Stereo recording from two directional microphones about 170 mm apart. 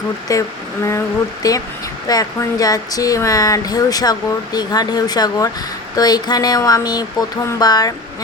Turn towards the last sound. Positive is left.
turn(degrees=25)  # may be behind; listen again after turning